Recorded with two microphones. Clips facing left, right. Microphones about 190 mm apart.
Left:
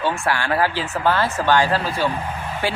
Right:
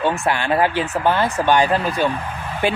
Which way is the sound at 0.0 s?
20° right (ahead or behind).